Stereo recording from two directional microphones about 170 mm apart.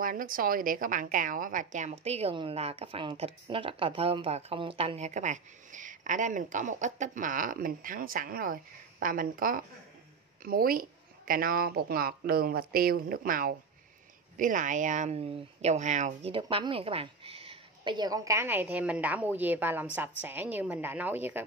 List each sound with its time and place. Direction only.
0.0 s a woman's voice: 55° right (ahead or behind)
16.3 s a woman's voice: 30° right (ahead or behind); by 21.5 s 10° right (ahead or behind)